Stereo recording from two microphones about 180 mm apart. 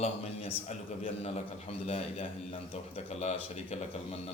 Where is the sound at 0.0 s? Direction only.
35° left (ahead or behind).